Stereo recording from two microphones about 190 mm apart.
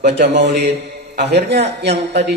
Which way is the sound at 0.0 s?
65° right (ahead or behind).